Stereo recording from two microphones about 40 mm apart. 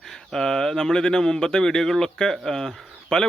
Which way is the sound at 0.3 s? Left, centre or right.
Centre.